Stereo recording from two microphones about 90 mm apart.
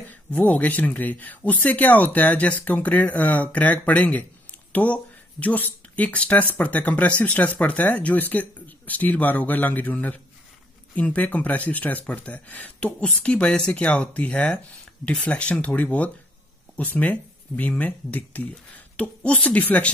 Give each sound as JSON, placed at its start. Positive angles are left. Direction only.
{"t": 0.1, "sound": "speech", "side_deg": 15}